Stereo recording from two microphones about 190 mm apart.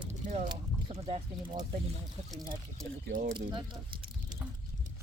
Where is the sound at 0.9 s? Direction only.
35° right (ahead or behind).